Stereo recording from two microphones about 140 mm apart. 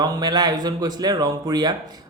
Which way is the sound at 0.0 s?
30° right (ahead or behind).